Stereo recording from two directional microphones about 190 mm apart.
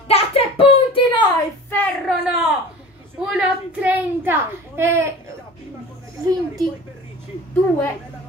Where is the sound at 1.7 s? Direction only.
10° left (ahead or behind).